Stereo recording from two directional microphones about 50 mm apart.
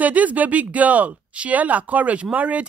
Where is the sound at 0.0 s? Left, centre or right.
Right.